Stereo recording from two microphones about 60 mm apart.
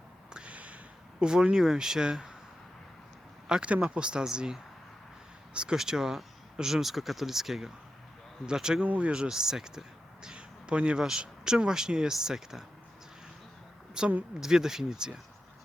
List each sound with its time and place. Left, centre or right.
0.3 s a sound: right
1.2 s speech: centre
3.4 s speech: centre
8.8 s speech: right
14.0 s speech: centre